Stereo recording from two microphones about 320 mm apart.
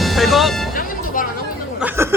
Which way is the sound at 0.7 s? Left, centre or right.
Left.